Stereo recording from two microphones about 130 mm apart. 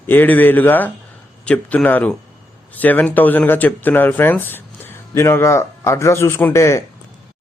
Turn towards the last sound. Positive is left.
turn(degrees=20)  # may be behind; listen again after turning